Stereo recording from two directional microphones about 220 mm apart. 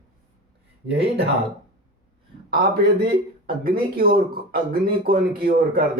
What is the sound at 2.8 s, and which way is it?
A man's voice, 45° right (ahead or behind).